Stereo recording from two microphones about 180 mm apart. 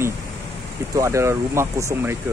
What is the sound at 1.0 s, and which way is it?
Speech, 15° right (ahead or behind).